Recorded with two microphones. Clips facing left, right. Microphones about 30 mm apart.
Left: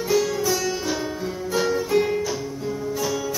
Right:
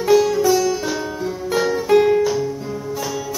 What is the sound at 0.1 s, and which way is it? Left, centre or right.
Music, centre.